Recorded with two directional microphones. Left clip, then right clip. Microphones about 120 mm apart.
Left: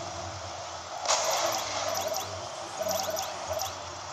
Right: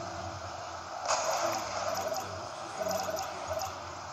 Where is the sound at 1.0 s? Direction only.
50° left (ahead or behind).